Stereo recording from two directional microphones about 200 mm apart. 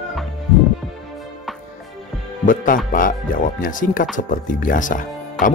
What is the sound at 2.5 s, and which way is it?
Speech, 45° left (ahead or behind).